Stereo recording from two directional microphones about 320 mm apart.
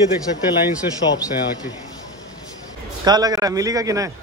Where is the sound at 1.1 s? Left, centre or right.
Centre.